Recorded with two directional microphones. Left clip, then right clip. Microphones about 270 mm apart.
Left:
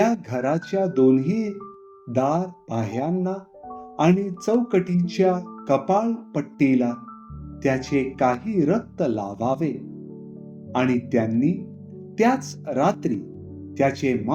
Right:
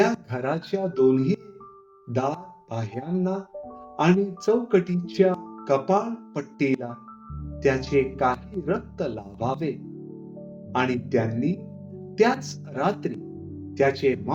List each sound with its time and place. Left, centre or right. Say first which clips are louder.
0.0 s speech: left 2 dB; left